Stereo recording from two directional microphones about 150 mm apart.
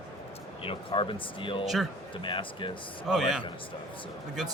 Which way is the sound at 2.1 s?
35° left (ahead or behind).